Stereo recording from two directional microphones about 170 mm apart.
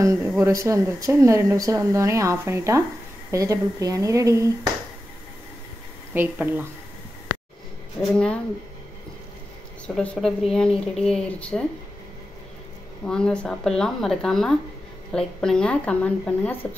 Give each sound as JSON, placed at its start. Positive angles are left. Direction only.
{"t": 0.0, "sound": "speech", "side_deg": -15}
{"t": 6.1, "sound": "speech", "side_deg": -10}
{"t": 8.1, "sound": "a woman's voice", "side_deg": 5}
{"t": 9.9, "sound": "speech", "side_deg": 5}
{"t": 13.0, "sound": "a woman's voice", "side_deg": 5}